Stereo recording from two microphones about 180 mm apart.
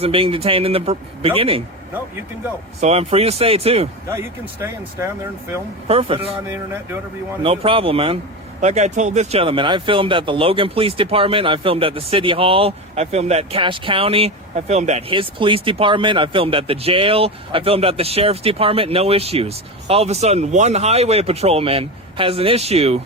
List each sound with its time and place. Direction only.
0.0 s speech: 30° right (ahead or behind)
2.8 s speech: 35° right (ahead or behind)
4.1 s speech: 15° right (ahead or behind)
5.9 s speech: 35° right (ahead or behind)
7.4 s speech: 30° right (ahead or behind)